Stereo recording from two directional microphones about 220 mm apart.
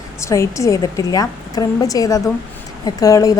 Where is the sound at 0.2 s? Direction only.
15° left (ahead or behind).